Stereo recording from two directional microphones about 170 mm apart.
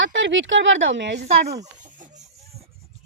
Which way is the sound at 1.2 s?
40° right (ahead or behind).